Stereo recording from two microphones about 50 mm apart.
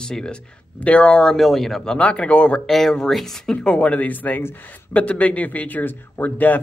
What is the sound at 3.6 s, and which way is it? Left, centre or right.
Speech, left.